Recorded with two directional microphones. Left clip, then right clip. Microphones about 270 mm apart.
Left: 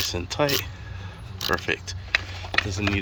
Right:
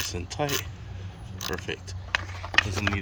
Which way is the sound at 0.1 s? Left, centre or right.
Centre.